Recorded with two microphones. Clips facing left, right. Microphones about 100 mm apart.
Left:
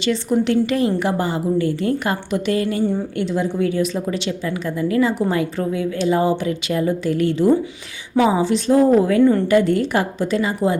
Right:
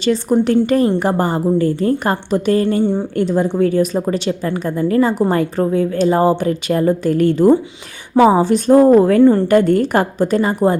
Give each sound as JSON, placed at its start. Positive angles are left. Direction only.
{"t": 0.0, "sound": "a woman's voice", "side_deg": -40}
{"t": 3.2, "sound": "a woman's voice", "side_deg": -45}
{"t": 9.2, "sound": "a woman's voice", "side_deg": -30}
{"t": 9.5, "sound": "a woman's voice", "side_deg": -50}